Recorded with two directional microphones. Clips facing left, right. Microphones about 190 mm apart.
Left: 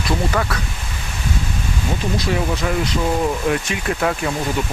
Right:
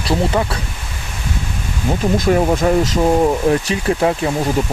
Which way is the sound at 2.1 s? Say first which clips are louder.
Right 8 dB; 50° right (ahead or behind).